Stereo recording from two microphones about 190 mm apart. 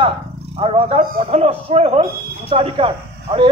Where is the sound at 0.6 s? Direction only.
30° right (ahead or behind).